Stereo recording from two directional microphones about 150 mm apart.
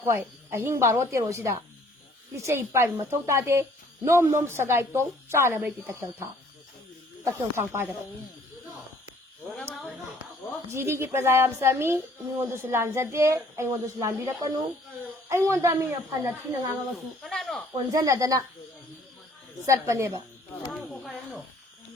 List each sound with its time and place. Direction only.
0.0 s speech: 15° right (ahead or behind)
7.5 s speech: 15° right (ahead or behind)
10.7 s speech: 15° right (ahead or behind)
17.2 s snake: centre (ahead or behind)
17.9 s speech: 20° right (ahead or behind)
19.6 s speech: 20° right (ahead or behind)
20.7 s a sound: centre (ahead or behind)